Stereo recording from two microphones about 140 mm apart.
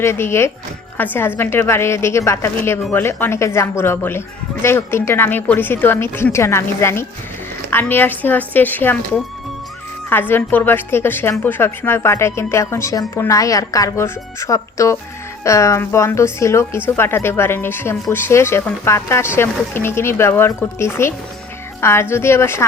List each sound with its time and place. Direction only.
0.0 s speech: 20° left (ahead or behind)
10.1 s a woman's voice: 15° left (ahead or behind)